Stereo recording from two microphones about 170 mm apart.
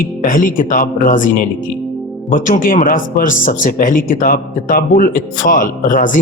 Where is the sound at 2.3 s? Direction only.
50° left (ahead or behind).